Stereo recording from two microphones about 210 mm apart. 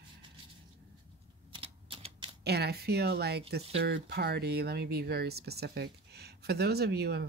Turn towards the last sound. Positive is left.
turn(degrees=-50)  # may be behind; listen again after turning